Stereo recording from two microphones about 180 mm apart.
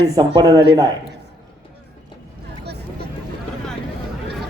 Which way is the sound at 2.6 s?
65° right (ahead or behind).